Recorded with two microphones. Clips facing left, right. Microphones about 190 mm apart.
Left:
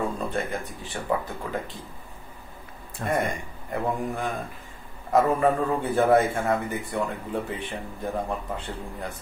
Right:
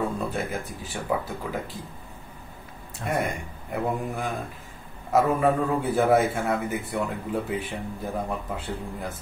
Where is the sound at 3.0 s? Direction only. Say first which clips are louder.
Left 2 dB; 55° left (ahead or behind).